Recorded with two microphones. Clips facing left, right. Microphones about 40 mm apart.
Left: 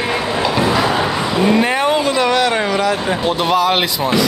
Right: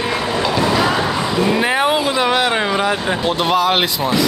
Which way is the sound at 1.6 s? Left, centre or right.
Centre.